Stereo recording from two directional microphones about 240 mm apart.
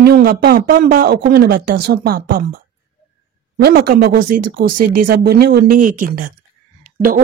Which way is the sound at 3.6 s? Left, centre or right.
Right.